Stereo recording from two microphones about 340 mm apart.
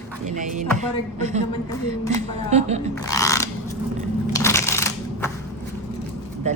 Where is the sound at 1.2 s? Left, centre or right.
Centre.